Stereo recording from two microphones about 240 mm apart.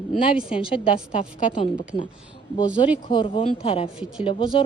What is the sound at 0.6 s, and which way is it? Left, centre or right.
A woman's voice, left.